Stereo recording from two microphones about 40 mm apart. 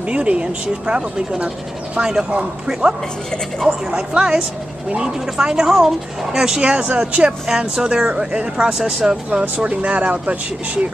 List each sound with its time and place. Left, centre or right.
0.1 s speech: right
2.0 s speech: centre
3.9 s speech: right
7.4 s speech: centre
8.7 s speech: centre
9.4 s speech: right